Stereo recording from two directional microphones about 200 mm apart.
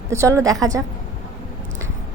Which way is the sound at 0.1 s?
15° right (ahead or behind).